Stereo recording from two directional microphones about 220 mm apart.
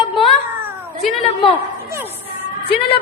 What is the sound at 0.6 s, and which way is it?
Cat, 10° right (ahead or behind).